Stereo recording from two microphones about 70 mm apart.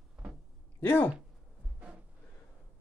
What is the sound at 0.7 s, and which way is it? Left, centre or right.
Speech, left.